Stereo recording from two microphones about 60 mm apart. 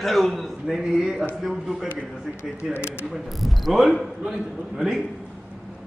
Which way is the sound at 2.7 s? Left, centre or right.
Left.